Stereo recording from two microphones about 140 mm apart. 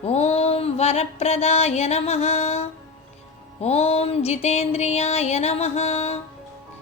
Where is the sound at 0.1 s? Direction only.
50° left (ahead or behind).